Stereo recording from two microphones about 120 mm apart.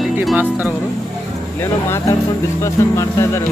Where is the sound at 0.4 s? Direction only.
15° right (ahead or behind).